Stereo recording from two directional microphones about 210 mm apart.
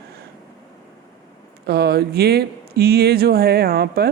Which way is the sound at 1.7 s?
50° right (ahead or behind).